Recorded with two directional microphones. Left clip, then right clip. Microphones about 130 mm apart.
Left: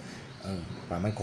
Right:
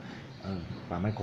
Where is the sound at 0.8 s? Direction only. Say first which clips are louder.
Left 2 dB; 25° left (ahead or behind).